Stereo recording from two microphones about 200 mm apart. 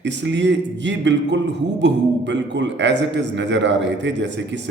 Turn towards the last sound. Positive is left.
turn(degrees=-60)  # may be behind; listen again after turning